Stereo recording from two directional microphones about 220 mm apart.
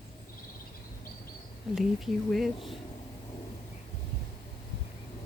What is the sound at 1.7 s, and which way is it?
Speech, centre (ahead or behind).